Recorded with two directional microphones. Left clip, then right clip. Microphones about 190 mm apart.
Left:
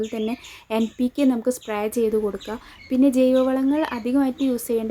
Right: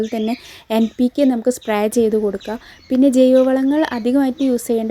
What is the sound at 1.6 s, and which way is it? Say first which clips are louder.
A woman's voice: right 6 dB; 35° right (ahead or behind).